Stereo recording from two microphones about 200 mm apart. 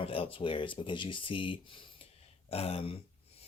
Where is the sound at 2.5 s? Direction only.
30° left (ahead or behind).